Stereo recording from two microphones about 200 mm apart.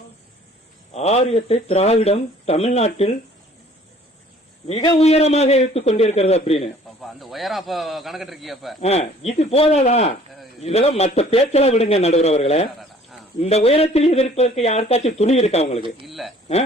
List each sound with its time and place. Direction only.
0.9 s speech: 30° left (ahead or behind)
4.7 s speech: 25° left (ahead or behind)
7.0 s a man's voice: centre (ahead or behind)
8.8 s speech: 30° left (ahead or behind)
16.0 s a man's voice: centre (ahead or behind)